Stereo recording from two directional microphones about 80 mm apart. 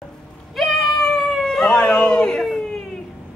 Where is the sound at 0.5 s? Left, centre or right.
Centre.